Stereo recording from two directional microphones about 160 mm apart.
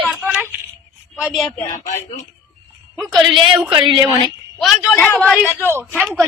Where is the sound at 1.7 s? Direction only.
50° left (ahead or behind).